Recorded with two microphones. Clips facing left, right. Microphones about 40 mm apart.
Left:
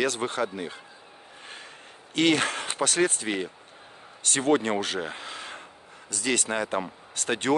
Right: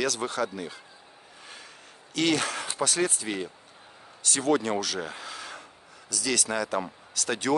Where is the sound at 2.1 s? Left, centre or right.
Left.